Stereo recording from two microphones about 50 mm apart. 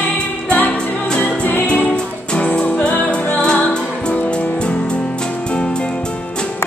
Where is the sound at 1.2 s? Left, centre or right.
Left.